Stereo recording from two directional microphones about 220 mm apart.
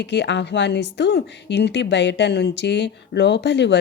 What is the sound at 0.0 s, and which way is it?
A woman's voice, 50° left (ahead or behind).